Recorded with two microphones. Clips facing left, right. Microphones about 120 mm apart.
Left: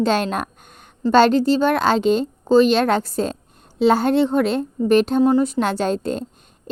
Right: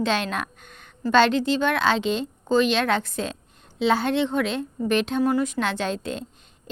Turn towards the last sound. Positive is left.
turn(degrees=45)  # may be behind; listen again after turning